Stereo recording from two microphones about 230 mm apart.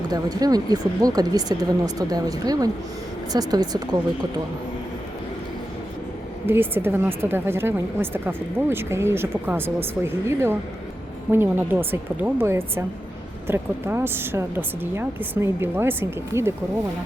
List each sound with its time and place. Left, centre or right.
0.1 s a woman's voice: centre
6.4 s a woman's voice: centre